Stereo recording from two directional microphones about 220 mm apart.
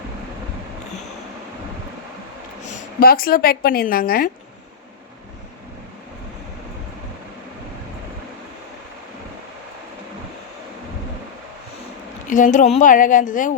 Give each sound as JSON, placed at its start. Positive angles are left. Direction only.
{"t": 2.6, "sound": "a woman's voice", "side_deg": 40}
{"t": 12.3, "sound": "speech", "side_deg": 35}